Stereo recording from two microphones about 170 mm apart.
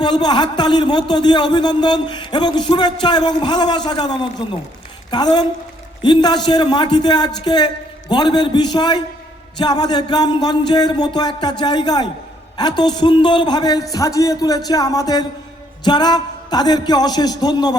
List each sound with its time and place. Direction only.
0.0 s a man's voice: 25° left (ahead or behind)